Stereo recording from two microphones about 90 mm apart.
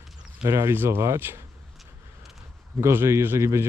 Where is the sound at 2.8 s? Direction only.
30° right (ahead or behind).